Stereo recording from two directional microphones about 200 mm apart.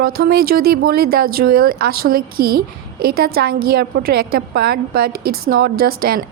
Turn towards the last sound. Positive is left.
turn(degrees=-50)  # may be behind; listen again after turning